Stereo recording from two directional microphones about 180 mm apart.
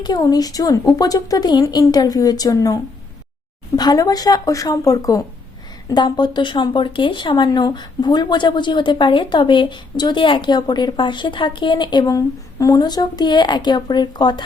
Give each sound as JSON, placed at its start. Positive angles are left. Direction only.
{"t": 0.0, "sound": "speech", "side_deg": 20}
{"t": 3.8, "sound": "speech", "side_deg": 20}